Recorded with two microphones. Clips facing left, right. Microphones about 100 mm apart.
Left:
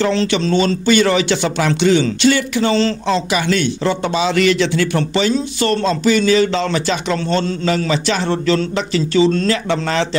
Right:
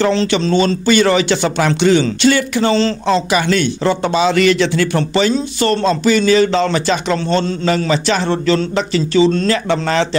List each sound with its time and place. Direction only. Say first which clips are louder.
0.0 s speech: right 2 dB; 35° right (ahead or behind)
9.5 s speech: right 2 dB; 40° right (ahead or behind)